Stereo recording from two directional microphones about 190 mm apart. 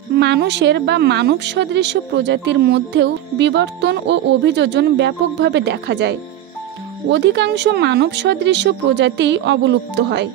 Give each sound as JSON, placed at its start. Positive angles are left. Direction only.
{"t": 0.2, "sound": "a woman's voice", "side_deg": -60}